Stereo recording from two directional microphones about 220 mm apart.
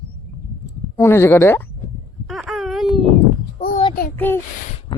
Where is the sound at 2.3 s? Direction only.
Centre (ahead or behind).